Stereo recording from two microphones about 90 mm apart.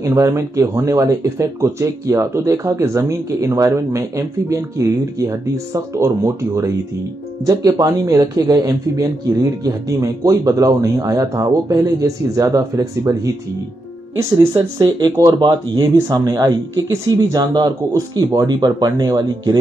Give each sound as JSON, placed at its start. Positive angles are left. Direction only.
{"t": 0.0, "sound": "speech", "side_deg": -35}
{"t": 14.8, "sound": "speech", "side_deg": -50}
{"t": 15.1, "sound": "speech", "side_deg": -35}